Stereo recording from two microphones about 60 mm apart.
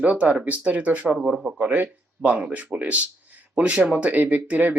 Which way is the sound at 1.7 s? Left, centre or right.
Right.